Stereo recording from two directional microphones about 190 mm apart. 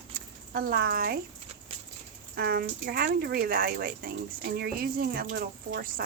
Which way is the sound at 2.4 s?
55° right (ahead or behind).